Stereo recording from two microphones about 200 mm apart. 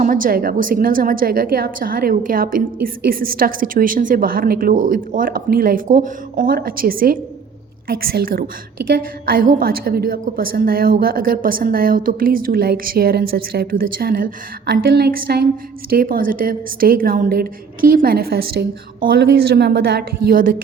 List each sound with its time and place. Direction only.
0.0 s a woman's voice: 45° right (ahead or behind)